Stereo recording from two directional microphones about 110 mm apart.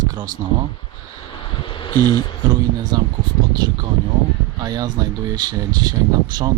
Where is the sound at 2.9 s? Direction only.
35° right (ahead or behind).